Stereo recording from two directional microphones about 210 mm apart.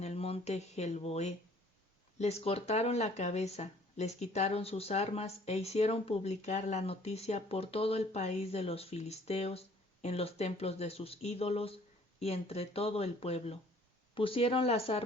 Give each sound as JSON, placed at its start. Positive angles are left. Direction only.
{"t": 0.0, "sound": "speech", "side_deg": 30}